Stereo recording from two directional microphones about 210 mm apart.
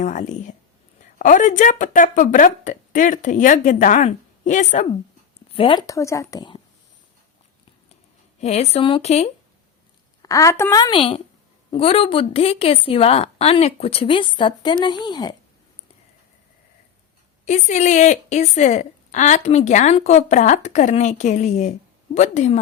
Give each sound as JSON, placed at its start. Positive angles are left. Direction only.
{"t": 0.0, "sound": "a woman's voice", "side_deg": 35}
{"t": 5.5, "sound": "speech", "side_deg": 25}
{"t": 8.4, "sound": "a woman's voice", "side_deg": 30}
{"t": 10.2, "sound": "a woman's voice", "side_deg": 15}
{"t": 17.4, "sound": "a woman's voice", "side_deg": 35}